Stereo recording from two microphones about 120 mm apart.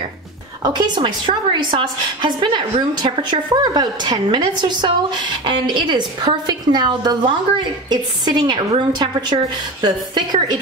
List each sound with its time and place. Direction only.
0.7 s a woman's voice: 40° right (ahead or behind)